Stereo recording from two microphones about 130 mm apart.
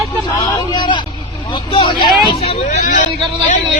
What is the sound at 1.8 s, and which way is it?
Speech, 35° left (ahead or behind).